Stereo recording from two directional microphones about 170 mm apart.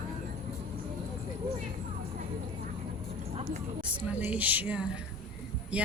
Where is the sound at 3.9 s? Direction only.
10° right (ahead or behind).